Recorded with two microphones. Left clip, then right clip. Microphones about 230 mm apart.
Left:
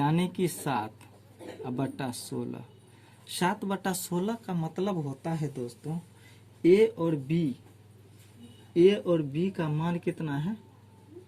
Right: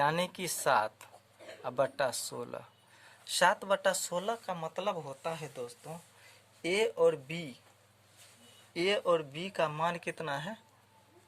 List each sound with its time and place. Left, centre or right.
0.0 s speech: right
6.6 s speech: right
8.7 s speech: right